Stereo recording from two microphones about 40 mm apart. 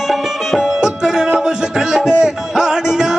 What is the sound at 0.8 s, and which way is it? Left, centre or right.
Music, centre.